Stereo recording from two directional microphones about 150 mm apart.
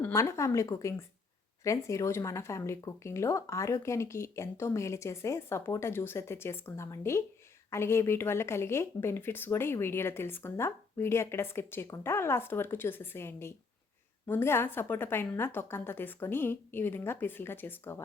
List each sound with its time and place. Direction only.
0.0 s speech: 20° left (ahead or behind)